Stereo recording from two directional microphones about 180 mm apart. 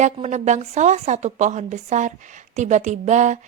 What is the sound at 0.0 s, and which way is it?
A woman's voice, 40° right (ahead or behind).